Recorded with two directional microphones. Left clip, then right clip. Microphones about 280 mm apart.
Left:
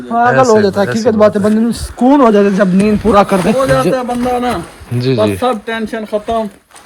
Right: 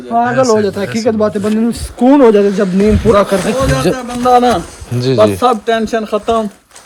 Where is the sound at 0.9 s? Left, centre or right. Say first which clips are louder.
Left 3 dB; centre.